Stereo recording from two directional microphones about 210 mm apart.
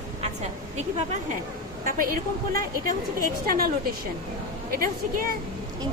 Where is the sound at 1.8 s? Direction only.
40° right (ahead or behind).